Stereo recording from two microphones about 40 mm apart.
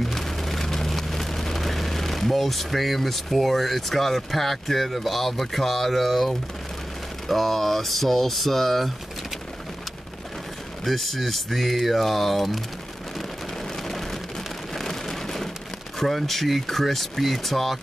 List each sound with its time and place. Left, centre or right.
0.0 s vehicle: centre
7.2 s speech: centre
10.8 s speech: centre
14.7 s rain: centre
16.0 s speech: centre